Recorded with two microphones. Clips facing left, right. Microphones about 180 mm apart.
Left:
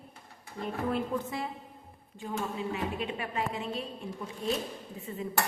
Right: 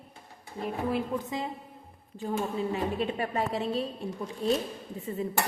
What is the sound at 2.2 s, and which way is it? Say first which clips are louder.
A woman's voice: right 4 dB; 35° right (ahead or behind).